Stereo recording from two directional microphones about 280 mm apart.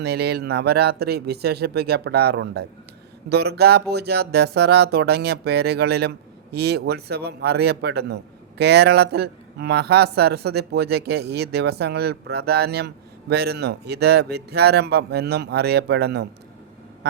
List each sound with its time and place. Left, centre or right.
0.0 s speech: right